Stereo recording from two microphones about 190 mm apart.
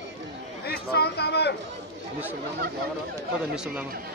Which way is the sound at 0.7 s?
55° left (ahead or behind).